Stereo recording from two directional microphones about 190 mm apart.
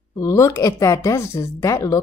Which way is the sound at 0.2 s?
15° left (ahead or behind).